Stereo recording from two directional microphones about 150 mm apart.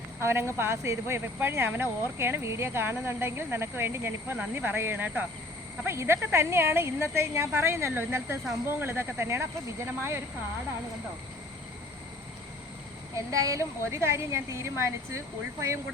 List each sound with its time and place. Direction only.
0.2 s speech: 15° right (ahead or behind)
13.3 s a woman's voice: 20° right (ahead or behind)